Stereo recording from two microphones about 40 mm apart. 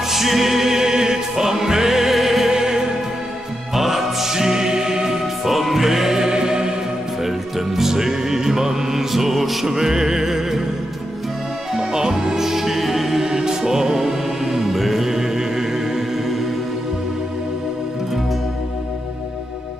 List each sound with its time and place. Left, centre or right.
0.1 s music: centre
2.5 s music: centre
7.2 s music: centre
11.7 s music: centre
13.2 s music: centre